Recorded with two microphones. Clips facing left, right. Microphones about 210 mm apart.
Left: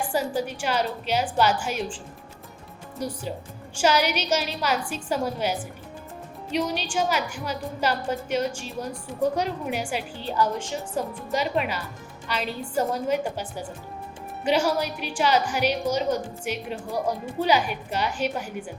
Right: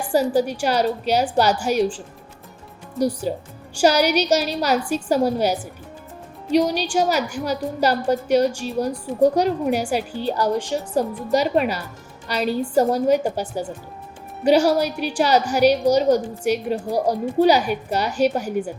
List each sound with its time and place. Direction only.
0.1 s a woman's voice: 40° right (ahead or behind)
3.3 s a woman's voice: 40° right (ahead or behind)